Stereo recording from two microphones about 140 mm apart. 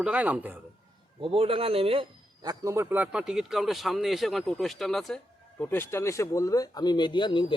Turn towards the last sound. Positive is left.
turn(degrees=35)  # may be behind; listen again after turning